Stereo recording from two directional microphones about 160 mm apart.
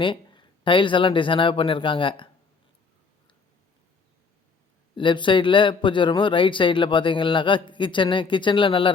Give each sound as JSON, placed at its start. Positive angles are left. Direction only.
{"t": 0.0, "sound": "speech", "side_deg": 30}
{"t": 4.9, "sound": "a man's voice", "side_deg": 30}